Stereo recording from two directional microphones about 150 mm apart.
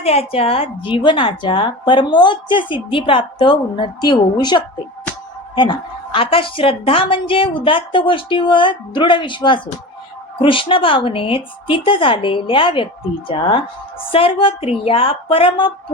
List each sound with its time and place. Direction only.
0.0 s a woman's voice: 40° left (ahead or behind)